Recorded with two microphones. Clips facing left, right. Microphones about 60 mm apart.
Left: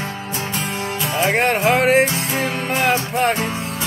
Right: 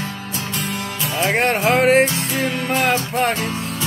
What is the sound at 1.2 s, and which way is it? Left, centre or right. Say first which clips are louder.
Music: left 1 dB; centre.